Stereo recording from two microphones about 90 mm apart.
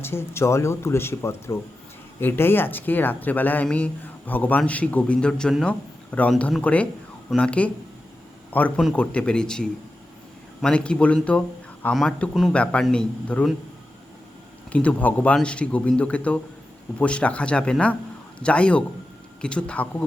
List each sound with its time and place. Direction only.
0.0 s speech: 30° left (ahead or behind); by 13.4 s 10° left (ahead or behind)
14.7 s speech: 15° left (ahead or behind)